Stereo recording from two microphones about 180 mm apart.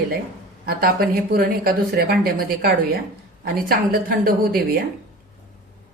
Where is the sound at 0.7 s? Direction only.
55° right (ahead or behind).